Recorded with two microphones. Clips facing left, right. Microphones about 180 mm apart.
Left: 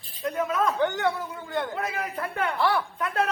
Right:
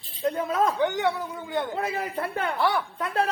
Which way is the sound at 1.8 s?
30° right (ahead or behind).